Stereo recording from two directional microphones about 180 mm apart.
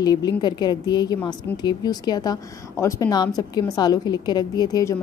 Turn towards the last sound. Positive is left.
turn(degrees=20)  # may be behind; listen again after turning